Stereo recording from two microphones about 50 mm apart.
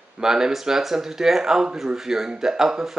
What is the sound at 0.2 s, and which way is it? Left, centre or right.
Speech, centre.